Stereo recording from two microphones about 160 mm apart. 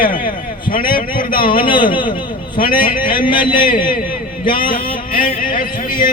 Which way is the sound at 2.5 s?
60° left (ahead or behind).